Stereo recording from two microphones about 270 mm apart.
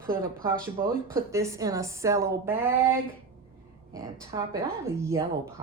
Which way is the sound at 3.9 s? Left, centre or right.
Centre.